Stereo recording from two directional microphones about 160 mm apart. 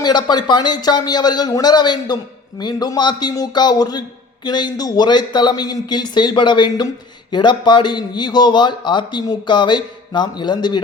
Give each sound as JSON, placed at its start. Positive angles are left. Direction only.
{"t": 0.0, "sound": "speech", "side_deg": 25}